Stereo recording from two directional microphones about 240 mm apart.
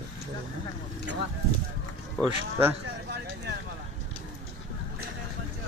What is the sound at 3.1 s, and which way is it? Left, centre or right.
Clip-clop, right.